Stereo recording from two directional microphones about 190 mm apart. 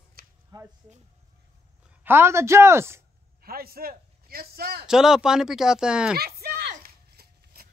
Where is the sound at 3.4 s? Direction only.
50° right (ahead or behind).